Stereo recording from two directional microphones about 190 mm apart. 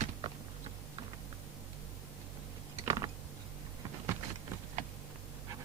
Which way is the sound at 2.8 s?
20° right (ahead or behind).